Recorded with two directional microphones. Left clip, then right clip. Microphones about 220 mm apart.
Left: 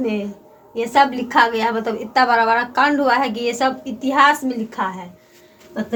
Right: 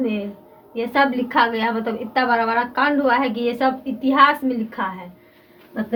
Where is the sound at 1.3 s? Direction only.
30° left (ahead or behind).